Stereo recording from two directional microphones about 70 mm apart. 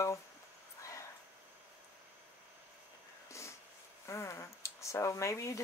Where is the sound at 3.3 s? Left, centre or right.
Left.